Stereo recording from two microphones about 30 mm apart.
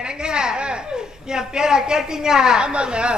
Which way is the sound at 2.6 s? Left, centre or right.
Right.